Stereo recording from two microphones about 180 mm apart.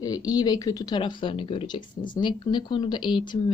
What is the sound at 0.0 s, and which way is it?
Speech, 20° left (ahead or behind).